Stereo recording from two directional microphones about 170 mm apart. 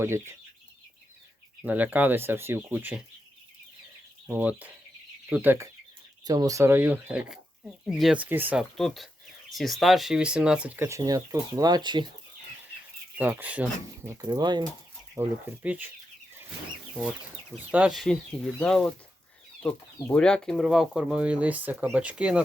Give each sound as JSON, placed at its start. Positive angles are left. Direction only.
{"t": 0.0, "sound": "speech", "side_deg": -15}
{"t": 1.6, "sound": "speech", "side_deg": -10}
{"t": 4.3, "sound": "speech", "side_deg": -10}
{"t": 8.8, "sound": "speech", "side_deg": 0}
{"t": 13.1, "sound": "speech", "side_deg": -10}
{"t": 14.3, "sound": "speech", "side_deg": -25}
{"t": 15.1, "sound": "speech", "side_deg": -10}
{"t": 16.9, "sound": "speech", "side_deg": -5}